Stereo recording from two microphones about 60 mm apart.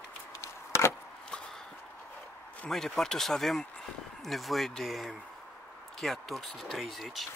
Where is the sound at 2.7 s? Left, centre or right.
Centre.